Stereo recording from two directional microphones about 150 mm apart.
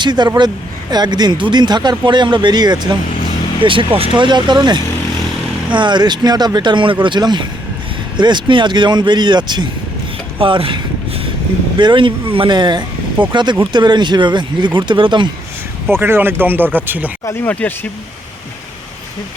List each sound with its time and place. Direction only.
0.0 s speech: 30° right (ahead or behind)
11.8 s speech: 30° right (ahead or behind)
15.9 s speech: 15° right (ahead or behind)
17.2 s speech: 10° left (ahead or behind)